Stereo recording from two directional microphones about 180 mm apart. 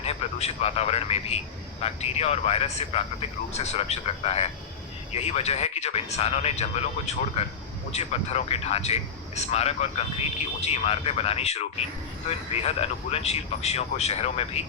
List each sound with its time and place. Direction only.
0.0 s a man's voice: 35° left (ahead or behind)
12.6 s speech: 35° left (ahead or behind)